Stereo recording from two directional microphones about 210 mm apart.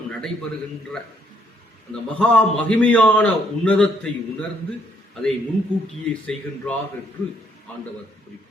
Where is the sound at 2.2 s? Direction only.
5° left (ahead or behind).